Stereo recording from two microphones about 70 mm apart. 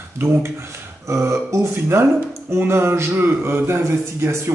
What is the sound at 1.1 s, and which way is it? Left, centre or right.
A man's voice, right.